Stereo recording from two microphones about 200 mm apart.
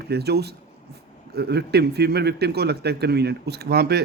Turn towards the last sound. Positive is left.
turn(degrees=-50)  # may be behind; listen again after turning